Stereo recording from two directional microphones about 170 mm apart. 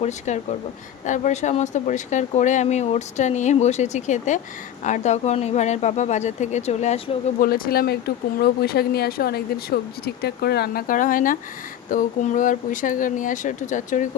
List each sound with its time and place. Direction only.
0.3 s speech: 45° left (ahead or behind)
7.3 s speech: 60° left (ahead or behind)